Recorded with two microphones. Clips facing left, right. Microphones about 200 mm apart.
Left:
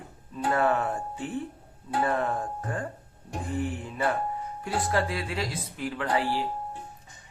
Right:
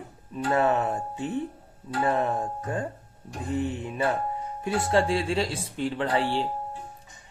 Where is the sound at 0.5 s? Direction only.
20° right (ahead or behind).